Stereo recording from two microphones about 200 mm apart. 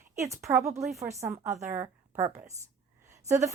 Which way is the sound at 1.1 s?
15° right (ahead or behind).